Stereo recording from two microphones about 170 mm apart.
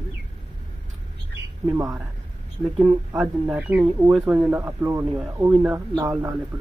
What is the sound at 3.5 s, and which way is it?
Speech, 5° right (ahead or behind).